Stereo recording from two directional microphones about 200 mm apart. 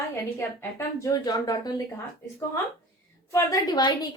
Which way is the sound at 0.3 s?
15° left (ahead or behind).